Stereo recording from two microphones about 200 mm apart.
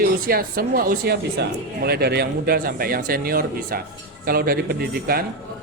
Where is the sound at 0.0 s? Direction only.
50° right (ahead or behind).